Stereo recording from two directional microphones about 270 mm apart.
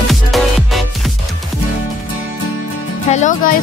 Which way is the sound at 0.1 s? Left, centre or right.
Centre.